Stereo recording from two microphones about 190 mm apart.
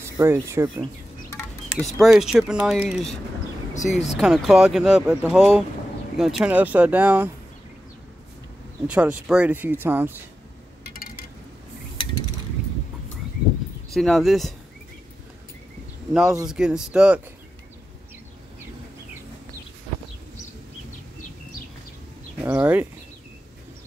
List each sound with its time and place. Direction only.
0.2 s speech: 15° right (ahead or behind)
1.8 s speech: centre (ahead or behind)
3.7 s speech: 40° left (ahead or behind)
4.2 s speech: 5° right (ahead or behind)
8.8 s speech: 5° right (ahead or behind)
10.8 s a sound: 50° left (ahead or behind)
13.9 s speech: centre (ahead or behind)
16.1 s speech: centre (ahead or behind)
22.4 s speech: 10° right (ahead or behind)